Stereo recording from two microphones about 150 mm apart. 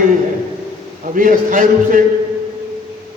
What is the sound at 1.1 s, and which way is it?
Speech, 65° right (ahead or behind).